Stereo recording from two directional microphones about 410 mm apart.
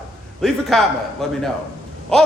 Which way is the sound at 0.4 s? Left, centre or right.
Centre.